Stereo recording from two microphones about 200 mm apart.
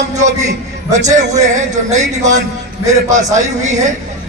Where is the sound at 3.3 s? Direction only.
35° right (ahead or behind).